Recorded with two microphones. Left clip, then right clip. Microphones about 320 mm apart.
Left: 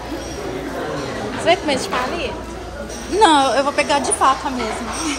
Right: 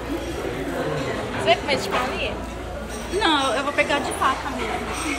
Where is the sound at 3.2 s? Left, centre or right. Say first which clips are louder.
Left 8 dB; centre.